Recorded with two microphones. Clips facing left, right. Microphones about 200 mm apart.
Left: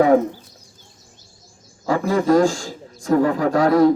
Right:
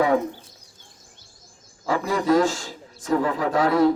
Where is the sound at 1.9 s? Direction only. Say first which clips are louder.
Left 4 dB; 40° left (ahead or behind).